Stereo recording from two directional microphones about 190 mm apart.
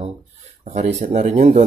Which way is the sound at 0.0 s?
40° right (ahead or behind).